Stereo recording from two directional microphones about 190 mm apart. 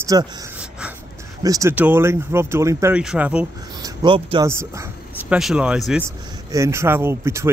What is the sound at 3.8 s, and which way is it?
Speech, 25° right (ahead or behind).